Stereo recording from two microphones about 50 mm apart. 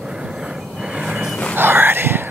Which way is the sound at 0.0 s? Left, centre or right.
Centre.